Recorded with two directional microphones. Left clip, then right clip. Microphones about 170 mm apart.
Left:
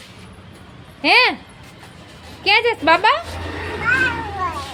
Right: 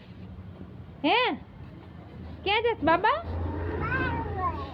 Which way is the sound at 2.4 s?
15° left (ahead or behind).